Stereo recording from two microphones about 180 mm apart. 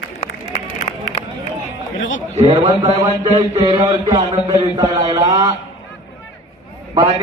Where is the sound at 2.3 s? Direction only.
25° right (ahead or behind).